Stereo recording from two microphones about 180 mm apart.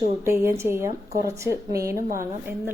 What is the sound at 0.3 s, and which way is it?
A woman's voice, 15° right (ahead or behind).